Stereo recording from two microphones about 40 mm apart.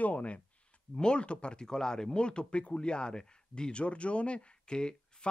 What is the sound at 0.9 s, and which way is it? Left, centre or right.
Speech, left.